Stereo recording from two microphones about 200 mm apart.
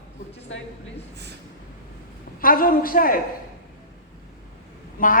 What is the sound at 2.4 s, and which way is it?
Speech, 45° left (ahead or behind).